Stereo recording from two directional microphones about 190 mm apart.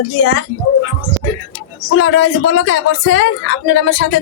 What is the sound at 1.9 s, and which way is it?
Speech, 85° left.